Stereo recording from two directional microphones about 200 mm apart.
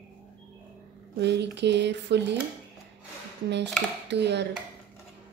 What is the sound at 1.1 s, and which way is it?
Speech, 60° right (ahead or behind).